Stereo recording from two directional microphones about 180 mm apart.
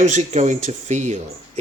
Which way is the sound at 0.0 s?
40° right (ahead or behind).